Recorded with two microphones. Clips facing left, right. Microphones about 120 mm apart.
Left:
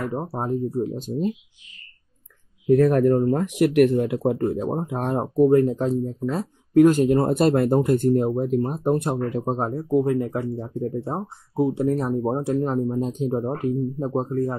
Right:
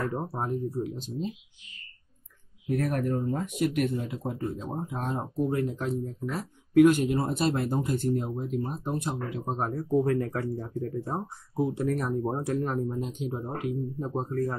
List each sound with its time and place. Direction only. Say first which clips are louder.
0.0 s speech: left 3 dB; 20° left (ahead or behind)
0.3 s speech: left 6 dB; 30° left (ahead or behind)
0.9 s speech: left 8 dB; 45° left (ahead or behind)
2.7 s speech: left 11 dB; 90° left; by 5.6 s 60° left (ahead or behind)
5.6 s speech: left 9 dB; 35° left (ahead or behind); by 9.4 s 55° left (ahead or behind)
9.4 s speech: left 6 dB; 30° left (ahead or behind)
13.0 s speech: left 9 dB; 40° left (ahead or behind)